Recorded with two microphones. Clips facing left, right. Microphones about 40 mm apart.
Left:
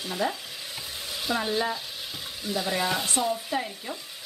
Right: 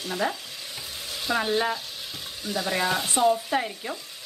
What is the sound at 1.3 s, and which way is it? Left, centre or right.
Stir, centre.